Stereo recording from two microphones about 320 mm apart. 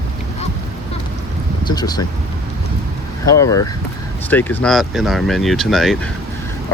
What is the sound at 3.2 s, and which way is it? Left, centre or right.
Speech, centre.